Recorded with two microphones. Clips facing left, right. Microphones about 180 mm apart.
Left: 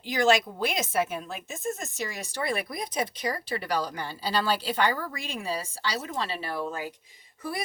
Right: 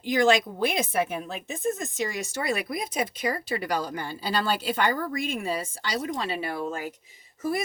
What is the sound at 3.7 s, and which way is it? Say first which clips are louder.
A woman's voice: right 1 dB; 50° right (ahead or behind).